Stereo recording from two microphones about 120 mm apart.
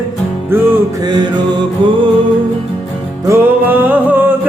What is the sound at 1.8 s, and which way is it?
Music, 45° right (ahead or behind).